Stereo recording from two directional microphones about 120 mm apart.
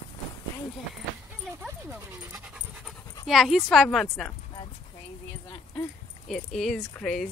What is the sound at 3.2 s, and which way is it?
Speech, centre (ahead or behind).